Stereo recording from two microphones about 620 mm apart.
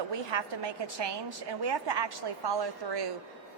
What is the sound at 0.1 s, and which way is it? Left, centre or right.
A woman's voice, right.